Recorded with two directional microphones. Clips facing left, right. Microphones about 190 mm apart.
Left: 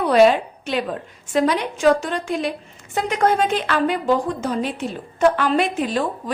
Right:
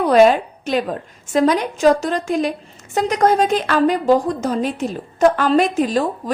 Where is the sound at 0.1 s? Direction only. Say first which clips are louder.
Right 2 dB; 45° right (ahead or behind).